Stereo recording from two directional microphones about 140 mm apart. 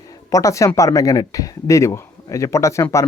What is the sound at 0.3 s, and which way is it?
Speech, 25° left (ahead or behind).